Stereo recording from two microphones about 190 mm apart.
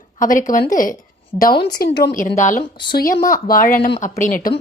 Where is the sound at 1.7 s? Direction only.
55° left (ahead or behind).